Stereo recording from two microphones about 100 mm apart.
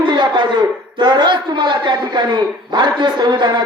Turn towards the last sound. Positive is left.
turn(degrees=-45)  # may be behind; listen again after turning